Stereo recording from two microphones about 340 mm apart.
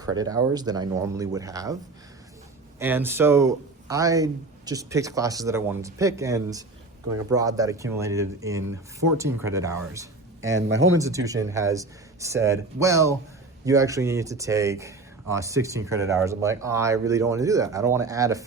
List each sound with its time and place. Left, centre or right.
0.0 s speech: centre
2.7 s speech: centre
10.4 s speech: right
10.9 s speech: centre